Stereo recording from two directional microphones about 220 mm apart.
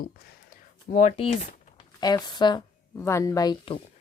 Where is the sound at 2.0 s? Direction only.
20° left (ahead or behind).